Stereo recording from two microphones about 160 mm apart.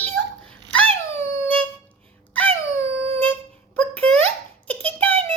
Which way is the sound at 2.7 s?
15° left (ahead or behind).